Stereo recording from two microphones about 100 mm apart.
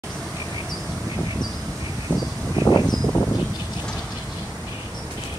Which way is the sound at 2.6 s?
45° left (ahead or behind).